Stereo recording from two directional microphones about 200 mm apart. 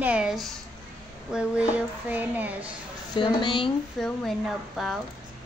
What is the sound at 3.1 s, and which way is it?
Speech, 25° left (ahead or behind).